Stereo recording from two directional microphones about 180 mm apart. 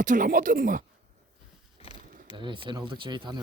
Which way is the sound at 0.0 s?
45° right (ahead or behind).